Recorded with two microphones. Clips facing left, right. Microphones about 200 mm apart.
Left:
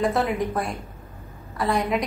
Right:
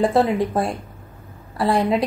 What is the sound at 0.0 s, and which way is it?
A woman's voice, 30° right (ahead or behind).